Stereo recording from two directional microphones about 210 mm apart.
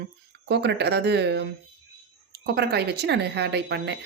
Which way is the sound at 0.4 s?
55° right (ahead or behind).